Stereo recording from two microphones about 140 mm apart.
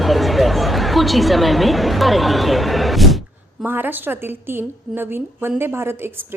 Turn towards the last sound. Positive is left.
turn(degrees=-15)  # may be behind; listen again after turning